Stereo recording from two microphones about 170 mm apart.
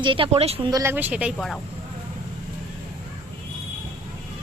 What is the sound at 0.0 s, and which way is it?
Speech, 30° right (ahead or behind).